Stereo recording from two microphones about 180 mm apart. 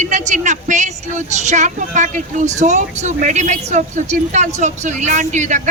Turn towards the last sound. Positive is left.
turn(degrees=-45)  # may be behind; listen again after turning